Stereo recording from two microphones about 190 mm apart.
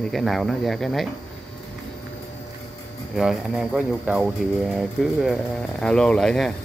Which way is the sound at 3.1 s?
Centre (ahead or behind).